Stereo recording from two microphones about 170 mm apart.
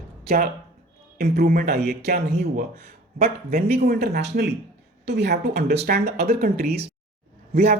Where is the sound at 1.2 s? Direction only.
60° right (ahead or behind).